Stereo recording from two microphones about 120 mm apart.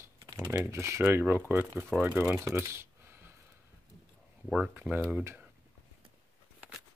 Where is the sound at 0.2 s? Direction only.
40° right (ahead or behind).